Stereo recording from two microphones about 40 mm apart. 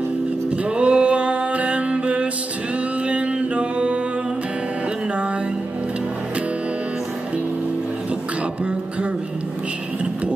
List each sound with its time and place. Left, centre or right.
0.7 s music: right